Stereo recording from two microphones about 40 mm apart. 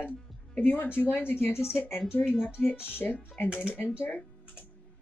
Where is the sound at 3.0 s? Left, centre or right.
Left.